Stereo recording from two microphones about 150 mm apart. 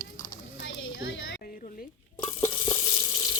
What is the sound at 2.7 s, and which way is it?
Water, 25° left (ahead or behind).